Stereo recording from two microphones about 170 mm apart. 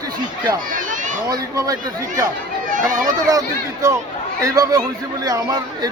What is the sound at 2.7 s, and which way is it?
Speech, 50° right (ahead or behind).